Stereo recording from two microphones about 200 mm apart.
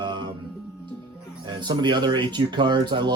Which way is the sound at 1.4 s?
20° right (ahead or behind).